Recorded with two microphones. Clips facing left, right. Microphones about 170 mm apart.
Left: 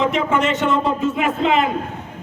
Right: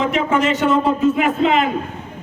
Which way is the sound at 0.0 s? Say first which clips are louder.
Right 1 dB; centre (ahead or behind).